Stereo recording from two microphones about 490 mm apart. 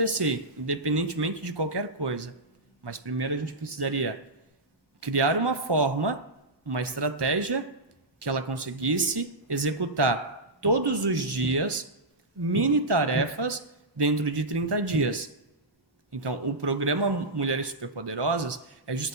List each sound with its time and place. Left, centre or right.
0.6 s a man's voice: right